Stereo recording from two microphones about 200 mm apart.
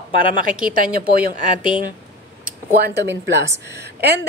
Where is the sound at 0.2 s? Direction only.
45° right (ahead or behind).